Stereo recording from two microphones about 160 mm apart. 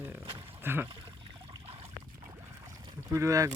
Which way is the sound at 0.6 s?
15° right (ahead or behind).